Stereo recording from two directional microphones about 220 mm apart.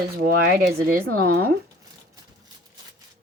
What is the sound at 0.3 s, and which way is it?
Speech, 45° right (ahead or behind).